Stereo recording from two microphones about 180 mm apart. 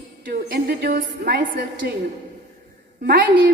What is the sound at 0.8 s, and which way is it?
Speech, 50° right (ahead or behind).